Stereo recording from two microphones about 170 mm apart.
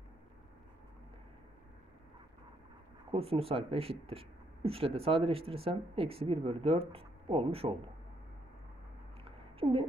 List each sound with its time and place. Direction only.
3.1 s speech: 35° right (ahead or behind)
9.6 s speech: 35° right (ahead or behind)